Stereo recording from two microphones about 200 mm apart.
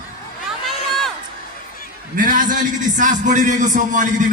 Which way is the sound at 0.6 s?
Centre (ahead or behind).